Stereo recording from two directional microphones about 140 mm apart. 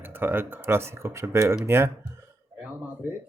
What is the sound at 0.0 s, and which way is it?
Speech, 15° right (ahead or behind).